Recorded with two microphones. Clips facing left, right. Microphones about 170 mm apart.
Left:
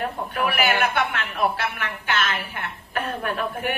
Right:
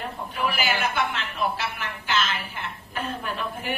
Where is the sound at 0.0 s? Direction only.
60° left (ahead or behind).